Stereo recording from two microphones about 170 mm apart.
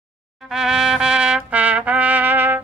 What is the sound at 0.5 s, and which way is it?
Trumpet, centre (ahead or behind).